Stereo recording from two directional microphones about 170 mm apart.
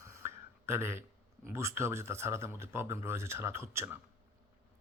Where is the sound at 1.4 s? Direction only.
15° right (ahead or behind).